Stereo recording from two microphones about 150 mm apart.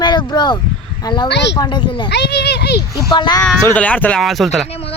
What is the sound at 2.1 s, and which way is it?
Speech, 90° left.